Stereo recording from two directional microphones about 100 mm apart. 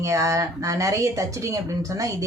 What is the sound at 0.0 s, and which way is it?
A woman's voice, 30° right (ahead or behind).